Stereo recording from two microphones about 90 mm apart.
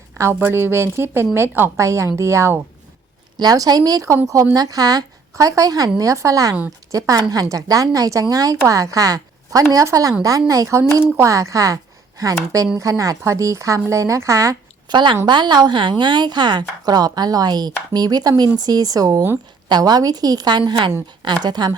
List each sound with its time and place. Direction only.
0.2 s a woman's voice: 25° right (ahead or behind)
3.3 s a woman's voice: 45° right (ahead or behind)
14.8 s a woman's voice: 60° right (ahead or behind)